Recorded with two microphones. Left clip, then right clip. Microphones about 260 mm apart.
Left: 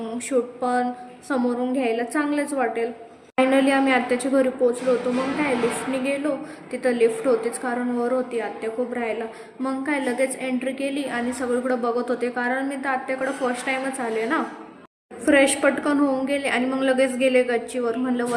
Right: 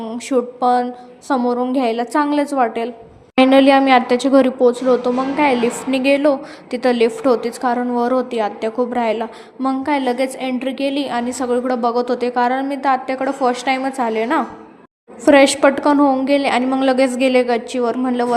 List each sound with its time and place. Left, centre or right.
0.1 s a woman's voice: right